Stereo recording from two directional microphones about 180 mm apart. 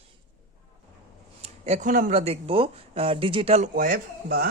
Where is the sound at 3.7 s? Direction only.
50° right (ahead or behind).